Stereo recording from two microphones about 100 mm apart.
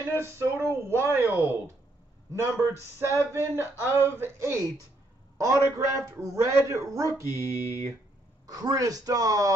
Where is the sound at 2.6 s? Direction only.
25° right (ahead or behind).